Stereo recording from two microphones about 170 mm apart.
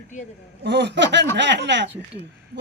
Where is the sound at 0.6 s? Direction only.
90° right.